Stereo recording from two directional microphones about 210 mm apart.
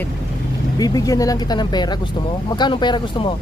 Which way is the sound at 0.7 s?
15° left (ahead or behind).